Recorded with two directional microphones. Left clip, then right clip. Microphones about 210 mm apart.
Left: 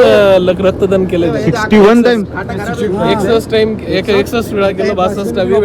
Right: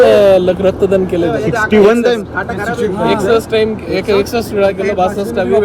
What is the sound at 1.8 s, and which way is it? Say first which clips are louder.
Speech: left 2 dB; 45° left (ahead or behind).